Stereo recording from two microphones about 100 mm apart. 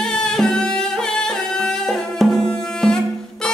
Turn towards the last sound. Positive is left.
turn(degrees=5)  # may be behind; listen again after turning